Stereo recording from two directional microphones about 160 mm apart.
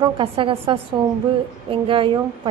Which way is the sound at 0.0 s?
35° right (ahead or behind).